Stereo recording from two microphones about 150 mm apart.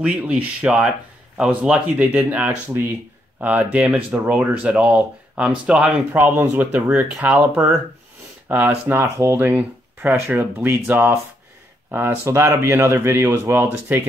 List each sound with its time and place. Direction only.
0.0 s speech: 10° right (ahead or behind)